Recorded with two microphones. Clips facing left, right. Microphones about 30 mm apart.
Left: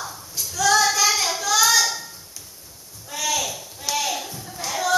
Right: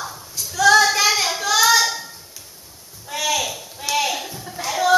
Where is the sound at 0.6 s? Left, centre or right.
Right.